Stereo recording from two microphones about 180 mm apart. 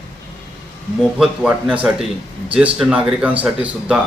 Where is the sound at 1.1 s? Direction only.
5° right (ahead or behind).